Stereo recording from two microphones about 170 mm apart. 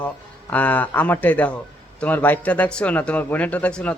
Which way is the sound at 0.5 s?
10° left (ahead or behind).